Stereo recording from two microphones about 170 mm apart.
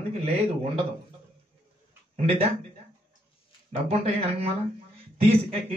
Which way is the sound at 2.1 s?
35° right (ahead or behind).